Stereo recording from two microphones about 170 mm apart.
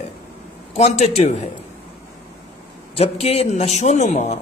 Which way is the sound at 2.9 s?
35° left (ahead or behind).